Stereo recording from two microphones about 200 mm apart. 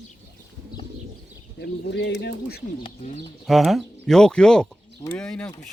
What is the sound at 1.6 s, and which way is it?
Speech, 60° left (ahead or behind).